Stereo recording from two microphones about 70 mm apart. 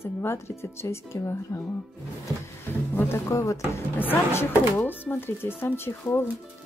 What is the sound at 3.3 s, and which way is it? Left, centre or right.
Speech, left.